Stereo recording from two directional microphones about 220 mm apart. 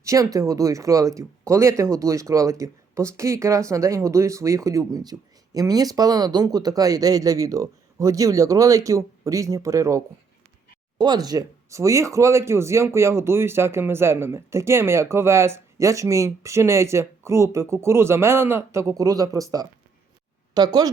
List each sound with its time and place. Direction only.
0.0 s speech: 15° right (ahead or behind)